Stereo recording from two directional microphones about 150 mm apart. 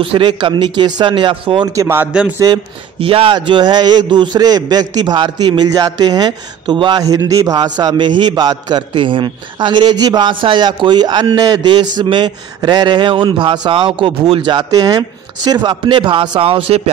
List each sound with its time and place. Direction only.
0.0 s speech: 35° right (ahead or behind)
1.8 s a man's voice: 15° right (ahead or behind)
3.0 s a man's voice: 35° right (ahead or behind)